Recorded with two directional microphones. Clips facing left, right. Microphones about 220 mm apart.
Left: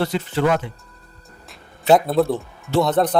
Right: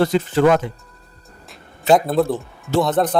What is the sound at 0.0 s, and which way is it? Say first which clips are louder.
Speech: right 5 dB; 45° right (ahead or behind).